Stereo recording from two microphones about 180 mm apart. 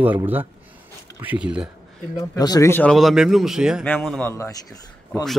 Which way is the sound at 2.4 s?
20° left (ahead or behind).